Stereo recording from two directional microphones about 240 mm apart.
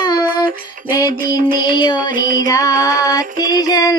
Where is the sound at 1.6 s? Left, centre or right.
Centre.